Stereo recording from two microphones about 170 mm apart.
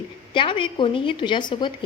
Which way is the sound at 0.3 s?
30° left (ahead or behind).